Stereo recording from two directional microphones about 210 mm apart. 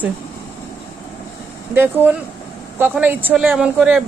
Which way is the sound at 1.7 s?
10° right (ahead or behind).